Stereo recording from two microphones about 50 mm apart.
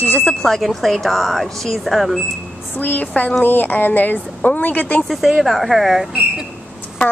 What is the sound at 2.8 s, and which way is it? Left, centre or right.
Speech, left.